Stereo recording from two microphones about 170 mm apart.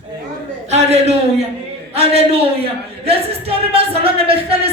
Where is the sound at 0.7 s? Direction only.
40° right (ahead or behind).